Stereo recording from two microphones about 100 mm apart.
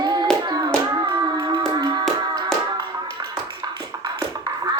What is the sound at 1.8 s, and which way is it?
Music, 45° right (ahead or behind).